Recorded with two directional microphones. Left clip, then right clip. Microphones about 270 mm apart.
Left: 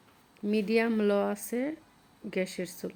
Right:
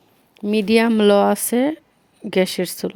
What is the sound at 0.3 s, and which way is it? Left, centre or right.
A woman's voice, right.